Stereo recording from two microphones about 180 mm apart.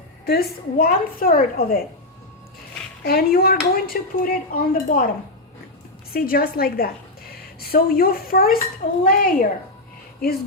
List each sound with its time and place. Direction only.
0.3 s speech: 60° left (ahead or behind)
3.0 s speech: 60° left (ahead or behind)
6.1 s a woman's voice: 55° left (ahead or behind)